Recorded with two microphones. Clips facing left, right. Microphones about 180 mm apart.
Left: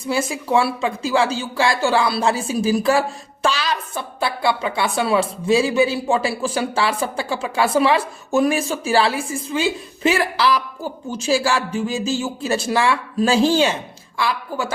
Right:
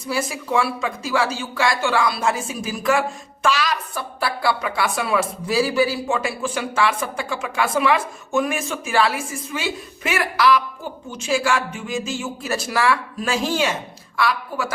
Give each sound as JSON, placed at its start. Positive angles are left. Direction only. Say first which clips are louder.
{"t": 0.1, "sound": "a woman's voice", "louder": "left 3 dB", "side_deg": 25}